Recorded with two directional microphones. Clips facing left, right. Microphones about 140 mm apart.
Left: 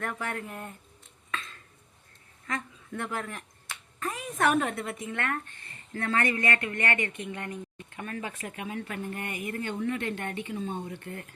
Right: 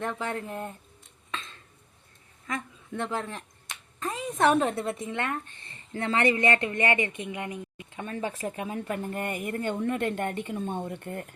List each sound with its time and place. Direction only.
0.0 s speech: 25° right (ahead or behind)
1.3 s a sound: 25° right (ahead or behind)
2.5 s speech: 20° right (ahead or behind)
5.1 s speech: 20° right (ahead or behind)
8.0 s speech: 30° right (ahead or behind); by 11.3 s 50° right (ahead or behind)